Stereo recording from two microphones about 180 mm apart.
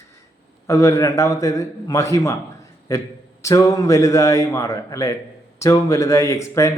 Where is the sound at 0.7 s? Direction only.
15° left (ahead or behind).